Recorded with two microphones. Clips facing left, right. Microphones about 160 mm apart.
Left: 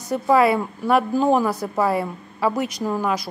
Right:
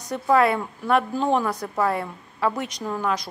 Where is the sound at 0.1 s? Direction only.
5° left (ahead or behind).